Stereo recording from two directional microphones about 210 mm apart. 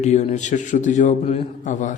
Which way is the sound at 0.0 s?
35° left (ahead or behind).